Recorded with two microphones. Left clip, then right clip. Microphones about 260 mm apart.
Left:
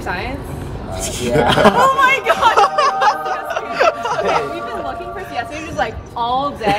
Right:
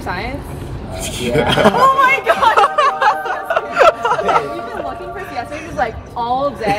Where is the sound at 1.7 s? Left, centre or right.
Centre.